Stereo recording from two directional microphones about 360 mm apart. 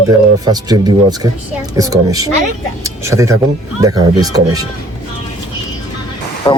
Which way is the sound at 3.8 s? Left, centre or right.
Centre.